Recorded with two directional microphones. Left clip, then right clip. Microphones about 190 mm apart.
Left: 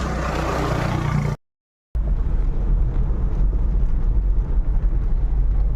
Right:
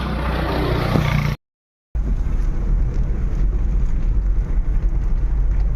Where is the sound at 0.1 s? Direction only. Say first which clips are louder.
Right 1 dB; 45° right (ahead or behind).